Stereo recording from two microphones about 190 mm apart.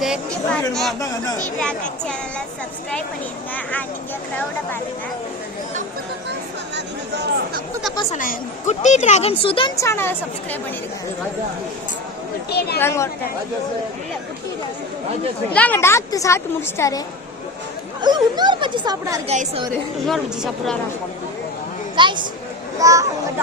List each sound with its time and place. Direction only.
0.0 s speech: centre (ahead or behind)
3.5 s speech: 10° left (ahead or behind)
6.7 s speech: 60° right (ahead or behind)
8.1 s a woman's voice: 40° left (ahead or behind)
9.7 s speech: 15° left (ahead or behind)
12.5 s speech: 55° left (ahead or behind)
12.8 s speech: 15° left (ahead or behind)
15.5 s speech: 10° left (ahead or behind)
18.0 s speech: 20° right (ahead or behind)
19.3 s a woman's voice: 35° right (ahead or behind)
20.1 s speech: centre (ahead or behind)
21.9 s a woman's voice: 25° right (ahead or behind)